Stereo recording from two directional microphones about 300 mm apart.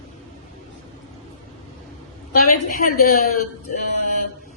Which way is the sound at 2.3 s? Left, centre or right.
Left.